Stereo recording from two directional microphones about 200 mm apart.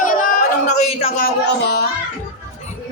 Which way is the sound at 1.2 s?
55° left (ahead or behind).